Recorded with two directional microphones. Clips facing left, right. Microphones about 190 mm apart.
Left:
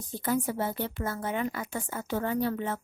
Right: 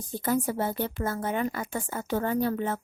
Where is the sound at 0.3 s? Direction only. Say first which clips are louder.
Right 2 dB; 45° right (ahead or behind).